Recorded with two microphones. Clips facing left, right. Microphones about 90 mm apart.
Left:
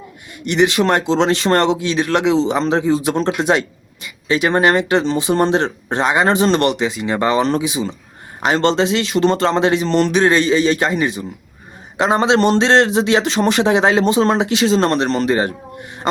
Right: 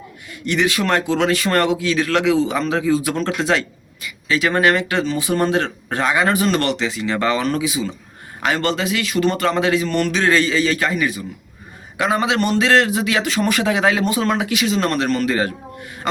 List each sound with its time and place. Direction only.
0.4 s speech: 20° left (ahead or behind)